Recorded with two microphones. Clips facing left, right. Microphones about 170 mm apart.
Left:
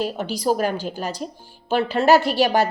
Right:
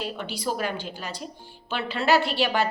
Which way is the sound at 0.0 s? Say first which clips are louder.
Left 7 dB; 40° left (ahead or behind).